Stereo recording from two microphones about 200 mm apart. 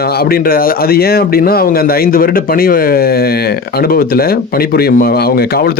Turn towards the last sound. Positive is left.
turn(degrees=50)  # may be behind; listen again after turning